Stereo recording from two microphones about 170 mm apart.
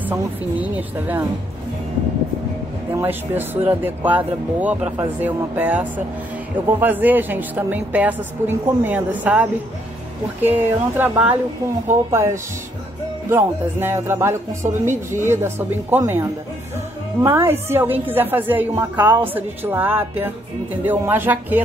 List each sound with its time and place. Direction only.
0.0 s a woman's voice: 10° right (ahead or behind)
2.9 s a woman's voice: 15° right (ahead or behind)